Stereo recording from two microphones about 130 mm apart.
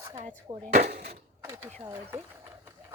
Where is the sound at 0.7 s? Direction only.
65° right (ahead or behind).